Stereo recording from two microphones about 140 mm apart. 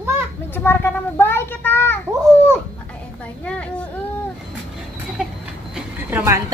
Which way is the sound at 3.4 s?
10° left (ahead or behind).